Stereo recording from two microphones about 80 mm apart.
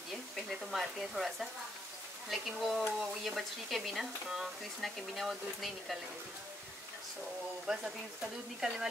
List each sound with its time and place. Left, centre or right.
0.5 s speech: centre
7.6 s speech: centre